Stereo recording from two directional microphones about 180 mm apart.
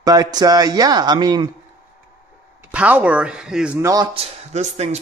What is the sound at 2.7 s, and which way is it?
Speech, 10° right (ahead or behind).